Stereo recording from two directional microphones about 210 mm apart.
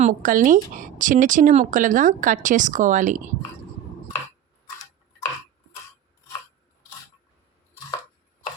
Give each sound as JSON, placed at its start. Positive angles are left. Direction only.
{"t": 0.0, "sound": "speech", "side_deg": -40}